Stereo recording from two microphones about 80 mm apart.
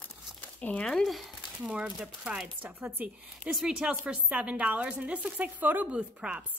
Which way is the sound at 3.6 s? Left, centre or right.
Centre.